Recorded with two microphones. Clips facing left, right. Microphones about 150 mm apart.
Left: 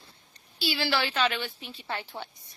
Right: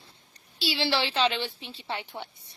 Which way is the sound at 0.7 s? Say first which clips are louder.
Right 1 dB; 30° right (ahead or behind).